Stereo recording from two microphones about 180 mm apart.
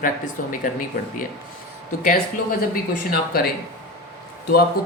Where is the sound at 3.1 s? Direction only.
60° left (ahead or behind).